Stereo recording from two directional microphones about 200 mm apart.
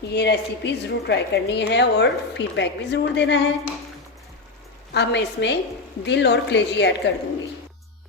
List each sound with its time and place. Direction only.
0.1 s a woman's voice: 55° left (ahead or behind)
4.9 s a woman's voice: 60° left (ahead or behind)